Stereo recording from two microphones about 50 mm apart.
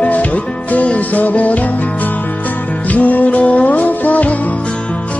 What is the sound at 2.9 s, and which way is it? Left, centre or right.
Music, left.